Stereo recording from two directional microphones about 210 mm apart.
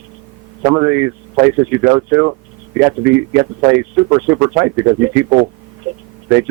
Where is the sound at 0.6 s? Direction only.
20° right (ahead or behind).